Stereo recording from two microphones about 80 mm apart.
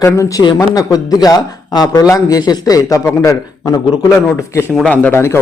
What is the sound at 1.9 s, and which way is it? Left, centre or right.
A man's voice, left.